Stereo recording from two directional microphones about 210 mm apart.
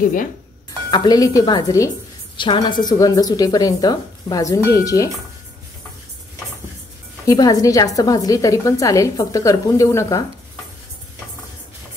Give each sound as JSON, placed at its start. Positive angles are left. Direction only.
{"t": 0.8, "sound": "a woman's voice", "side_deg": 20}
{"t": 7.2, "sound": "a woman's voice", "side_deg": 15}